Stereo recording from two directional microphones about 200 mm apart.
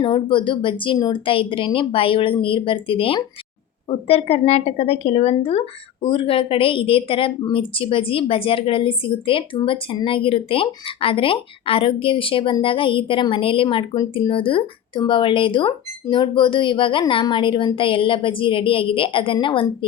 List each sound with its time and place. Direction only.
0.0 s speech: 25° left (ahead or behind)